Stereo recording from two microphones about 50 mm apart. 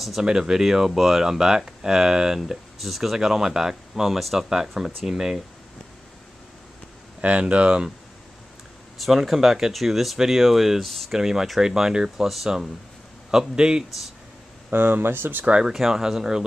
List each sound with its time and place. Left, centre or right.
0.2 s speech: centre
7.2 s speech: right
8.9 s speech: centre
11.1 s speech: centre
14.7 s speech: right
15.6 s speech: centre